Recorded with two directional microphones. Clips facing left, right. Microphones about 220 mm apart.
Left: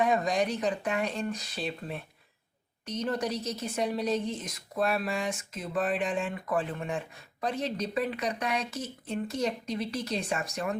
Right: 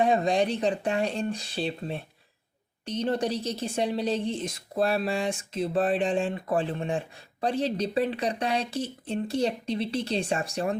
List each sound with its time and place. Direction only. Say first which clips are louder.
0.0 s a woman's voice: right 3 dB; 30° right (ahead or behind)